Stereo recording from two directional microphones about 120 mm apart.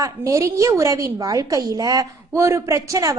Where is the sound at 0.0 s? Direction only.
25° right (ahead or behind).